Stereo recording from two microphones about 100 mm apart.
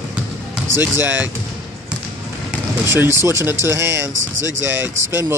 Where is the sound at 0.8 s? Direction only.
20° right (ahead or behind).